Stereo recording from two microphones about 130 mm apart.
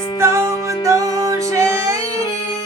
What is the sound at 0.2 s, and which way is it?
Music, 20° right (ahead or behind).